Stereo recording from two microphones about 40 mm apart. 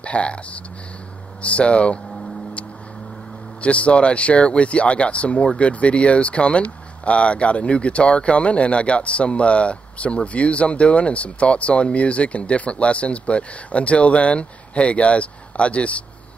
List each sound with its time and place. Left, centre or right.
0.0 s speech: left
1.4 s speech: left
3.6 s speech: left